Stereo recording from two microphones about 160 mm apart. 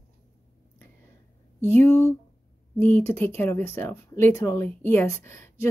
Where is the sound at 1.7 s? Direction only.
15° left (ahead or behind).